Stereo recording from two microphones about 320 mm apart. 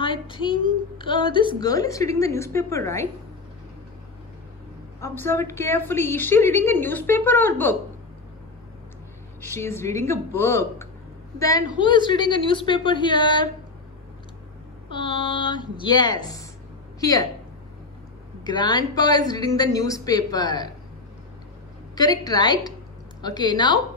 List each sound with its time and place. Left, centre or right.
0.0 s child singing: centre
0.9 s a woman's voice: centre
5.0 s a woman's voice: centre
9.5 s a woman's voice: centre
14.9 s a woman's voice: centre
18.4 s a woman's voice: centre
21.9 s a woman's voice: centre